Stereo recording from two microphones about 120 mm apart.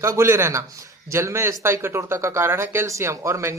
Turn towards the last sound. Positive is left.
turn(degrees=-25)  # may be behind; listen again after turning